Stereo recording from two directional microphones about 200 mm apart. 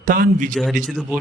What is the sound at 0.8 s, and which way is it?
Speech, 10° right (ahead or behind).